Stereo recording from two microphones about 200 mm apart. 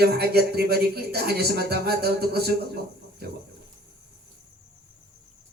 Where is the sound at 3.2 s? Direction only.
50° right (ahead or behind).